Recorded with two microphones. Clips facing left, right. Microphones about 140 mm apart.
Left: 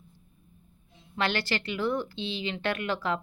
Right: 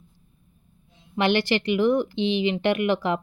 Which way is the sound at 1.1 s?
15° right (ahead or behind).